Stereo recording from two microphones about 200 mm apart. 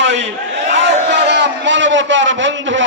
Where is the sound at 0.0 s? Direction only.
65° right (ahead or behind).